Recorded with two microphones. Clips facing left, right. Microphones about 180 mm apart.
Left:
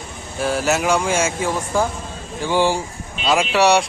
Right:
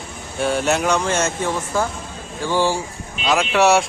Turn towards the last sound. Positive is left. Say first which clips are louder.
# even
turn(degrees=0)  # may be behind; listen again after turning